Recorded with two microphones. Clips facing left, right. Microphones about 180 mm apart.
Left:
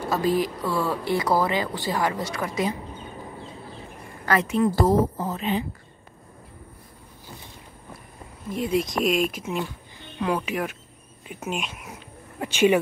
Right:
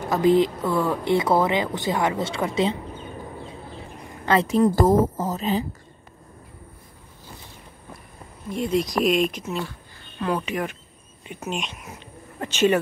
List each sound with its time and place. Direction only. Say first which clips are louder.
0.0 s speech: right 5 dB; 20° right (ahead or behind)
4.3 s a woman's voice: right 3 dB; 35° right (ahead or behind)
4.7 s a woman's voice: right 2 dB; 45° right (ahead or behind)
8.5 s speech: right 1 dB; 5° left (ahead or behind)